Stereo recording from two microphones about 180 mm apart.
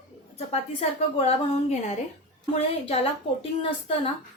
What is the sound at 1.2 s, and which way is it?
Speech, 35° left (ahead or behind).